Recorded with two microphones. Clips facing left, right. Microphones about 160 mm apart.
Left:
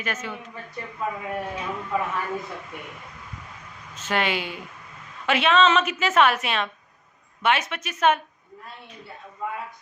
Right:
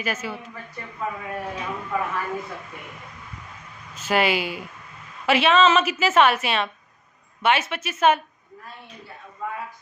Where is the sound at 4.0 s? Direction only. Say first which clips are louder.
Right 4 dB; 10° right (ahead or behind).